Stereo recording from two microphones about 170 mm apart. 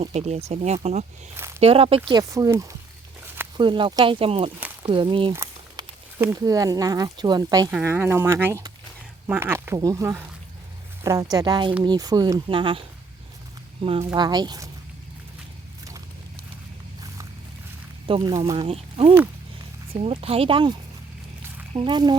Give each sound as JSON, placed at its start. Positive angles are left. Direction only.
{"t": 0.0, "sound": "speech", "side_deg": -40}
{"t": 1.4, "sound": "a sound", "side_deg": -15}
{"t": 1.6, "sound": "speech", "side_deg": -35}
{"t": 2.0, "sound": "speech", "side_deg": -25}
{"t": 5.7, "sound": "speech", "side_deg": -15}
{"t": 7.7, "sound": "speech", "side_deg": -10}
{"t": 14.0, "sound": "speech", "side_deg": -20}
{"t": 18.1, "sound": "speech", "side_deg": -25}
{"t": 18.5, "sound": "speech", "side_deg": -30}